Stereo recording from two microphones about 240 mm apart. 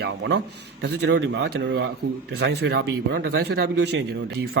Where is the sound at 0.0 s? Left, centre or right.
Right.